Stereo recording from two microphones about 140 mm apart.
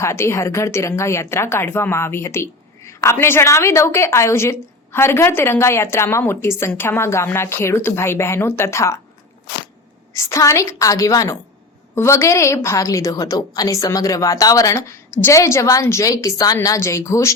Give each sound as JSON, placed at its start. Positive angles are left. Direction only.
{"t": 0.0, "sound": "a woman's voice", "side_deg": 20}
{"t": 10.2, "sound": "a woman's voice", "side_deg": 20}